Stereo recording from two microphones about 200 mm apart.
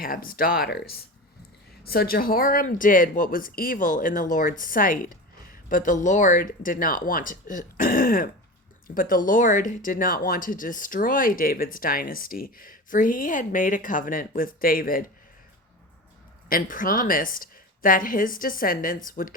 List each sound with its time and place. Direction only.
0.0 s speech: 45° left (ahead or behind)
16.5 s speech: 45° left (ahead or behind)